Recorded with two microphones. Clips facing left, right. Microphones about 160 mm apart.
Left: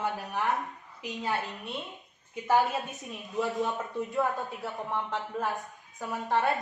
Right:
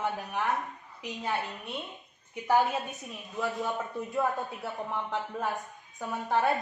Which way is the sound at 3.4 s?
20° left (ahead or behind).